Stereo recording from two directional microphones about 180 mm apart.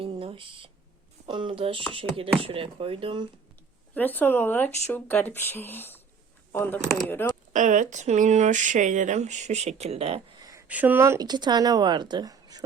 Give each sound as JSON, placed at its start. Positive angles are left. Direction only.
{"t": 0.0, "sound": "a sound", "side_deg": -30}
{"t": 1.3, "sound": "speech", "side_deg": -30}
{"t": 3.9, "sound": "speech", "side_deg": 10}
{"t": 7.5, "sound": "speech", "side_deg": -45}
{"t": 10.7, "sound": "speech", "side_deg": -10}